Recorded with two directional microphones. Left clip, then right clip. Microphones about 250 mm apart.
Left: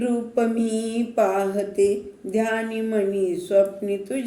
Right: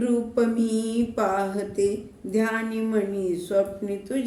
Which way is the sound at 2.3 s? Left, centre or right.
Centre.